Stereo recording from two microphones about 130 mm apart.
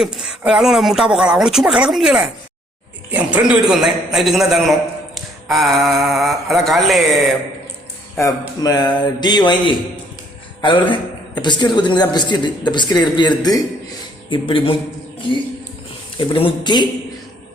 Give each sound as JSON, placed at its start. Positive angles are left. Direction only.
{"t": 0.0, "sound": "speech", "side_deg": -5}
{"t": 8.2, "sound": "a woman's voice", "side_deg": 30}
{"t": 16.1, "sound": "a woman's voice", "side_deg": 40}